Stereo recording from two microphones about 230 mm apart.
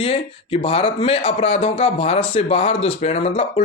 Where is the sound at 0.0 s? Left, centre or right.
Left.